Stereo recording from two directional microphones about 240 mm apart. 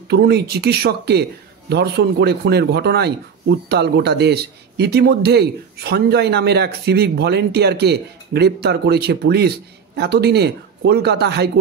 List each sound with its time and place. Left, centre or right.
0.1 s speech: right